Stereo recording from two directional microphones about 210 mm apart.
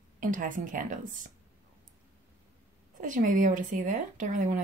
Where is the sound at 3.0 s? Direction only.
40° right (ahead or behind).